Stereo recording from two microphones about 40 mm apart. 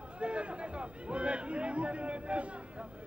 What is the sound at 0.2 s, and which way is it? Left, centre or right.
Speech, right.